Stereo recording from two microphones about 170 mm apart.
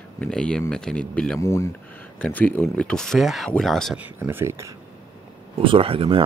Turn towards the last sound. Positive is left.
turn(degrees=-35)  # may be behind; listen again after turning